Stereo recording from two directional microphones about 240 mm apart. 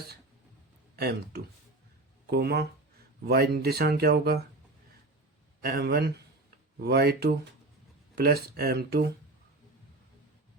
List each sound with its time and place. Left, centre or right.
0.9 s speech: right
5.6 s speech: right